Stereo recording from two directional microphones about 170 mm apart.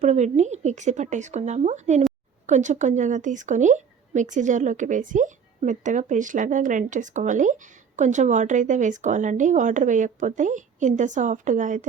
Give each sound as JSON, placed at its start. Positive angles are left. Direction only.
{"t": 0.0, "sound": "a woman's voice", "side_deg": -40}